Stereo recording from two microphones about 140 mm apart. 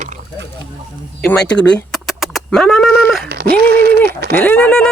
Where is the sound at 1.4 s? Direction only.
5° left (ahead or behind).